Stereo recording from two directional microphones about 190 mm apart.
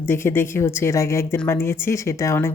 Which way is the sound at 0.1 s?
10° left (ahead or behind).